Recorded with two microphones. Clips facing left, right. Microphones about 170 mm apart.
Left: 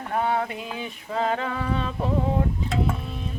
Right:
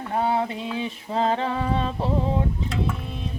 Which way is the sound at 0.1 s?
25° right (ahead or behind).